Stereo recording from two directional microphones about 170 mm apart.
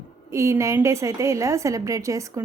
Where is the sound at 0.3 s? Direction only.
15° right (ahead or behind).